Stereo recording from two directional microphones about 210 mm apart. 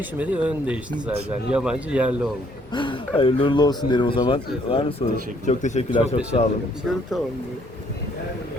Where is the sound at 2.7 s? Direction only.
25° left (ahead or behind).